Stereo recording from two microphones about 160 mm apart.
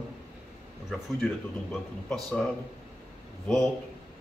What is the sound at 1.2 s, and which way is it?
Speech, 5° left (ahead or behind).